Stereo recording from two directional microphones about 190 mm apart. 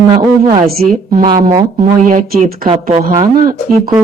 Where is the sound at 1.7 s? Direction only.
45° right (ahead or behind).